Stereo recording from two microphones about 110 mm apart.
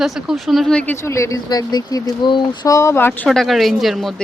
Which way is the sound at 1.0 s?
25° left (ahead or behind).